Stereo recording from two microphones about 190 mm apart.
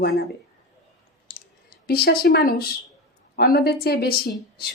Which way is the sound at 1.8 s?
55° left (ahead or behind).